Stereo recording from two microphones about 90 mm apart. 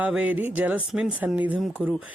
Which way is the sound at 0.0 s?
15° right (ahead or behind).